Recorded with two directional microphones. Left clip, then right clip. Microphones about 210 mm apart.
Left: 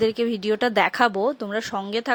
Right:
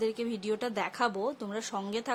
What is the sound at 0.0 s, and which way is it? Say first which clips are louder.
A woman's voice: left 10 dB; 30° left (ahead or behind).